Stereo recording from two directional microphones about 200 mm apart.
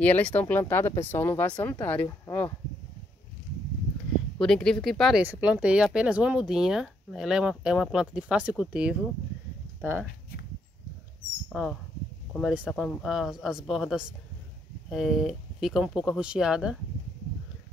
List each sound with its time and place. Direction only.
0.0 s speech: 5° left (ahead or behind)
4.4 s speech: 5° left (ahead or behind)
11.4 s speech: centre (ahead or behind)